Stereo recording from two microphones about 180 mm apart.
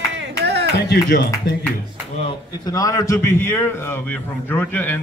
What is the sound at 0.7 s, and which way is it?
Speech, 70° left (ahead or behind).